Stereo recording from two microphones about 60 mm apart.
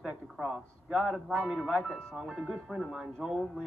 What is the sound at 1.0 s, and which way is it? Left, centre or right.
Speech, centre.